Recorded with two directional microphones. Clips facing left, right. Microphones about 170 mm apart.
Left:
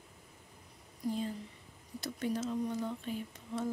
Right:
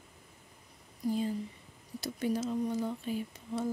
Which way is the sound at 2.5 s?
5° right (ahead or behind).